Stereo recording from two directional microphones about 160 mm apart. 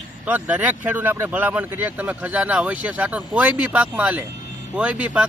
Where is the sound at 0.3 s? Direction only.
10° right (ahead or behind).